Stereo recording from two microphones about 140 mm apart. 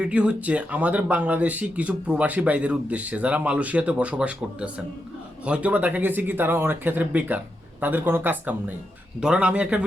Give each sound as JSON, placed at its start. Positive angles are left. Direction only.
{"t": 0.0, "sound": "speech", "side_deg": -10}